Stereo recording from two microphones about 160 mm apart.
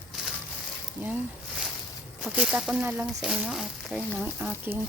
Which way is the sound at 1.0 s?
10° right (ahead or behind).